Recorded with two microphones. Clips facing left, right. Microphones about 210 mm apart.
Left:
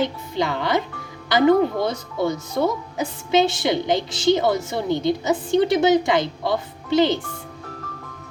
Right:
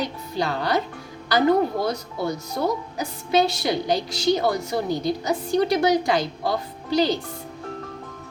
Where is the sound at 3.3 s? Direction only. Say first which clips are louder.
Left 2 dB; 20° left (ahead or behind).